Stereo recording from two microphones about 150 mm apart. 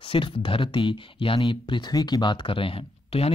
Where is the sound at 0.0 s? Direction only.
35° left (ahead or behind).